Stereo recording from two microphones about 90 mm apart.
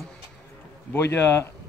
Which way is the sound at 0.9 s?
30° left (ahead or behind).